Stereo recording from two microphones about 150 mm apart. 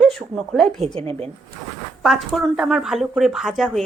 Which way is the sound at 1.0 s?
40° right (ahead or behind).